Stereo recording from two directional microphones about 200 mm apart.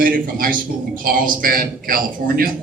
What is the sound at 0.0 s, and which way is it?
A man's voice, 45° right (ahead or behind).